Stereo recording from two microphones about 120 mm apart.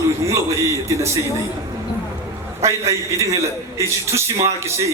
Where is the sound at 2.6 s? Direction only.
25° right (ahead or behind).